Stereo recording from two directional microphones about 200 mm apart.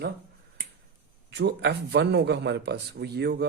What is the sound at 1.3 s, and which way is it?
Speech, 55° right (ahead or behind).